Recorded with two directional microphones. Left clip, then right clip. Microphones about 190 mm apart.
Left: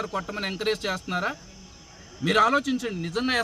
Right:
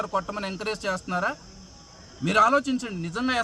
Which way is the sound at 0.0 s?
5° right (ahead or behind).